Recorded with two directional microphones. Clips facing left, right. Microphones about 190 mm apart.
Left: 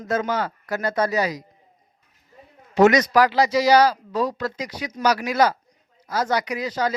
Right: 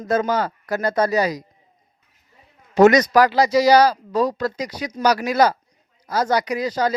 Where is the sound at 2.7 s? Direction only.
40° right (ahead or behind).